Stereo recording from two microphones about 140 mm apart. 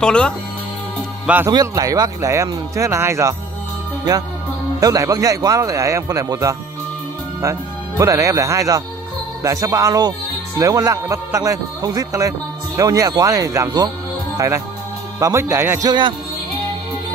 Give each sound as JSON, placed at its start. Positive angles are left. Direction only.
{"t": 0.0, "sound": "speech", "side_deg": 5}
{"t": 1.2, "sound": "speech", "side_deg": -10}
{"t": 1.5, "sound": "a man's voice", "side_deg": -25}
{"t": 4.7, "sound": "a man's voice", "side_deg": -25}
{"t": 8.0, "sound": "a man's voice", "side_deg": -20}
{"t": 15.9, "sound": "speech", "side_deg": -35}